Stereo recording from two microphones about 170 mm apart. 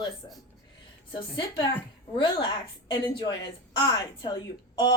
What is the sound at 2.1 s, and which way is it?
Speech, 30° left (ahead or behind).